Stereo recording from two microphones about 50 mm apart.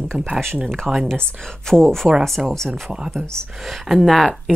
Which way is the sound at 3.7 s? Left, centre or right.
Centre.